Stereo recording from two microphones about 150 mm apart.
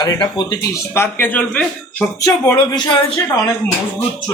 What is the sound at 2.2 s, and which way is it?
Speech, 20° left (ahead or behind).